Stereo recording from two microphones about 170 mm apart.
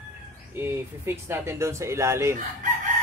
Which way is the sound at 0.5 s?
15° right (ahead or behind).